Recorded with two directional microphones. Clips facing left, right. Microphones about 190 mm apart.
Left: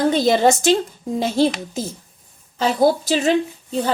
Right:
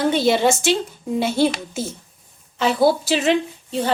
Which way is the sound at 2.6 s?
40° left (ahead or behind).